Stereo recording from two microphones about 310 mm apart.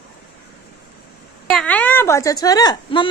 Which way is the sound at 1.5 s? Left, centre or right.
Centre.